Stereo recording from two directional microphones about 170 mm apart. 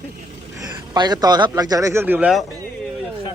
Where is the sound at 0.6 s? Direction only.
25° right (ahead or behind); by 2.4 s 5° right (ahead or behind).